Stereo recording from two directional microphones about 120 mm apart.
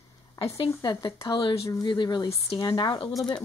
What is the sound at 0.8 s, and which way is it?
Speech, 40° left (ahead or behind).